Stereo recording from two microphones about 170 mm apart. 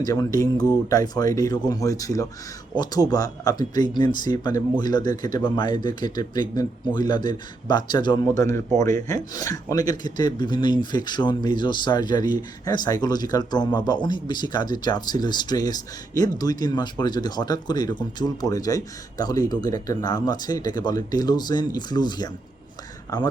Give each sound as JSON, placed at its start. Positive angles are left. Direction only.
{"t": 0.0, "sound": "a man's voice", "side_deg": 20}